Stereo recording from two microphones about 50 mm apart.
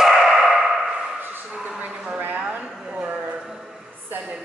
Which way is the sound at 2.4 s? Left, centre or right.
Right.